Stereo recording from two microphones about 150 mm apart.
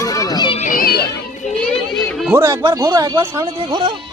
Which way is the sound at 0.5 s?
60° left (ahead or behind).